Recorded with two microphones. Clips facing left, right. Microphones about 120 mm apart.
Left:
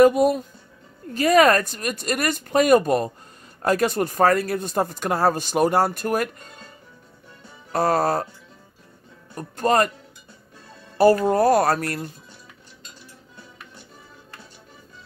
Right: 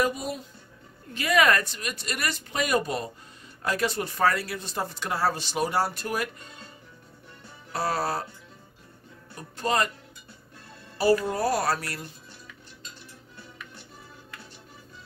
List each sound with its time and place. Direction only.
0.0 s speech: 55° left (ahead or behind)
1.1 s speech: 40° left (ahead or behind)
7.7 s speech: 45° left (ahead or behind)
9.3 s speech: 50° left (ahead or behind)
11.0 s speech: 50° left (ahead or behind)